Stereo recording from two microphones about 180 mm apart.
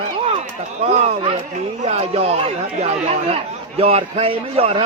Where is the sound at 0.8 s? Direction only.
35° right (ahead or behind).